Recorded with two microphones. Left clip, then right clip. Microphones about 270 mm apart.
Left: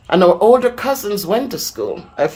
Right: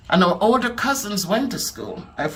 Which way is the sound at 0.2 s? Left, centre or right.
Centre.